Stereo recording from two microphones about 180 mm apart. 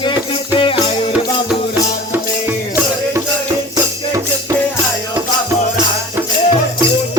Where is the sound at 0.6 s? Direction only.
30° left (ahead or behind).